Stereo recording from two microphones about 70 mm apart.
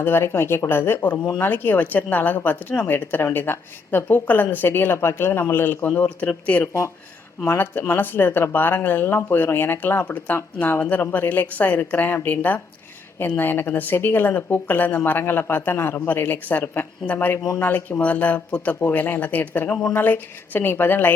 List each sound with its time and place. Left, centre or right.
0.0 s speech: left
6.0 s speech: centre
7.4 s speech: left
18.8 s speech: left